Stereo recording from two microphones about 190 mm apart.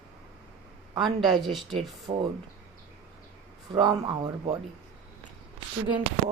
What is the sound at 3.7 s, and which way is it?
Speech, 25° right (ahead or behind).